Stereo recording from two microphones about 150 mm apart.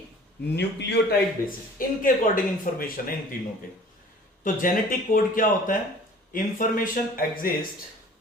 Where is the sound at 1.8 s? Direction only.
70° left (ahead or behind).